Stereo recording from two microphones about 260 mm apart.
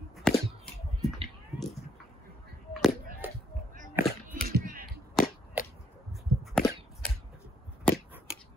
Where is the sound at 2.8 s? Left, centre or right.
Centre.